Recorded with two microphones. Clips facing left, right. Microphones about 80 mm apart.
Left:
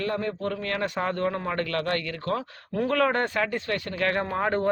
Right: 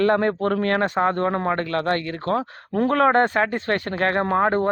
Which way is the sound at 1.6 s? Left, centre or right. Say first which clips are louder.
Right 4 dB; right.